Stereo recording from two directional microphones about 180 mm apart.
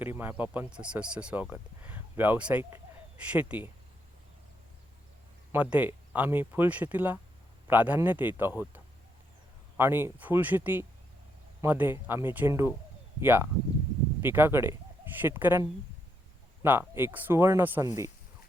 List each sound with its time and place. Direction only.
0.0 s speech: 10° right (ahead or behind)
5.5 s speech: 10° right (ahead or behind)
16.6 s speech: 10° right (ahead or behind)